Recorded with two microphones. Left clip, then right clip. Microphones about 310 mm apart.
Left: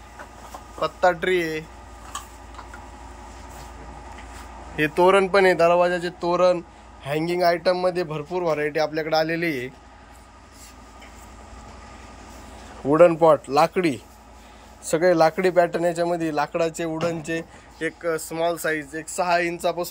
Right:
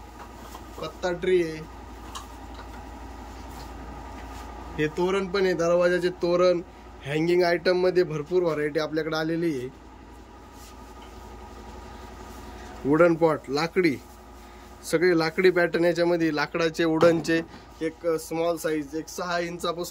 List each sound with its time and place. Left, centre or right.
0.7 s speech: centre
4.7 s speech: centre
5.7 s speech: centre
12.9 s a man's voice: centre
16.9 s speech: centre
17.2 s speech: centre